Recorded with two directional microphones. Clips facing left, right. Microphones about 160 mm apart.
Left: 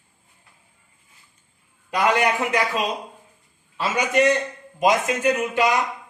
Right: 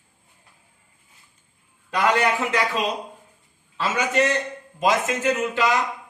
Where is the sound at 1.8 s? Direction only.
15° left (ahead or behind).